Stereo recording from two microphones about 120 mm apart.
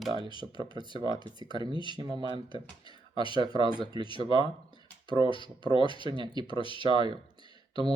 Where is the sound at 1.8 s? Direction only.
45° left (ahead or behind).